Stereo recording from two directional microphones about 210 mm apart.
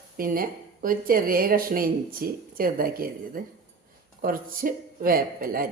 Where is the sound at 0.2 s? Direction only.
40° right (ahead or behind).